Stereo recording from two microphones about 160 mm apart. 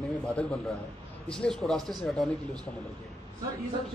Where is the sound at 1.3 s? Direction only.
5° left (ahead or behind).